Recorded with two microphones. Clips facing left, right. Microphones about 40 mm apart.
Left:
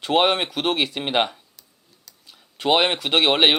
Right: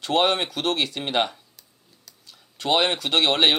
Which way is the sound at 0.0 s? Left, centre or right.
Centre.